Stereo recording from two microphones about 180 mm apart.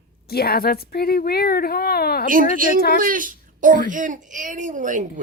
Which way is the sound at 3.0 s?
50° right (ahead or behind).